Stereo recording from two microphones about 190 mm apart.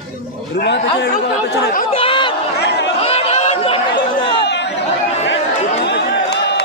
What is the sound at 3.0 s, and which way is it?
Chatter, 30° left (ahead or behind).